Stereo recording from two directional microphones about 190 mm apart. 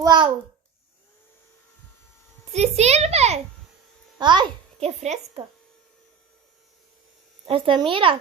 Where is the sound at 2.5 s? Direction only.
35° right (ahead or behind).